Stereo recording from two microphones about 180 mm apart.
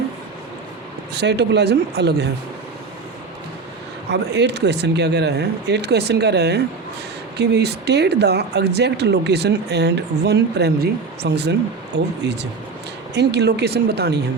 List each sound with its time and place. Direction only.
1.1 s speech: 70° right (ahead or behind)
4.1 s speech: 70° right (ahead or behind)